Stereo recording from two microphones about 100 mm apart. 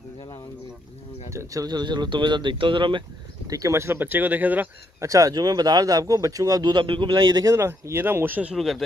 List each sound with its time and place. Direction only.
1.3 s speech: 30° right (ahead or behind); by 3.0 s 55° right (ahead or behind)
3.4 s speech: 35° right (ahead or behind); by 4.6 s 15° right (ahead or behind)
5.0 s speech: 35° right (ahead or behind)
7.5 s speech: 25° right (ahead or behind)
8.5 s speech: centre (ahead or behind)